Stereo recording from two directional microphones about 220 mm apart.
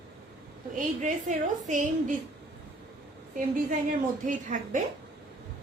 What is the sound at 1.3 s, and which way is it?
Speech, 35° right (ahead or behind).